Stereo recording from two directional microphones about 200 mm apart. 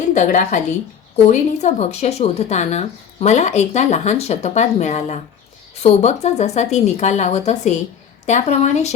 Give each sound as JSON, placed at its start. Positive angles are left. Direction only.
{"t": 0.1, "sound": "a woman's voice", "side_deg": 35}